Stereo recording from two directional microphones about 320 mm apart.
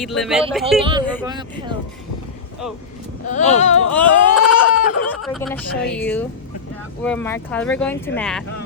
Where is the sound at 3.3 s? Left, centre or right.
Left.